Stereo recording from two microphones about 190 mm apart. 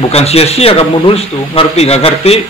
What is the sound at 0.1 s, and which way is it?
Speech, 35° left (ahead or behind).